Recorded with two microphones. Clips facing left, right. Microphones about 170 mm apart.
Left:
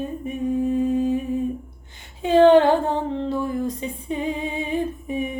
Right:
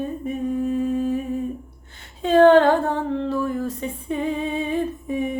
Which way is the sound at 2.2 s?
15° left (ahead or behind).